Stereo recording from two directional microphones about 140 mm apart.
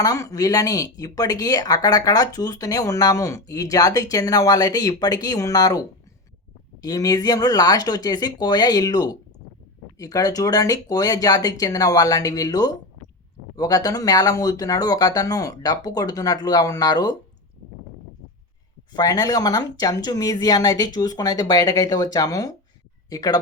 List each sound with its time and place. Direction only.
0.0 s speech: 25° left (ahead or behind)
6.8 s speech: 25° left (ahead or behind)
18.9 s speech: 25° left (ahead or behind)